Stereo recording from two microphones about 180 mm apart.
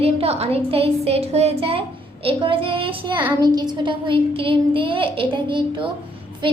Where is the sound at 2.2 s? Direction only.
30° right (ahead or behind).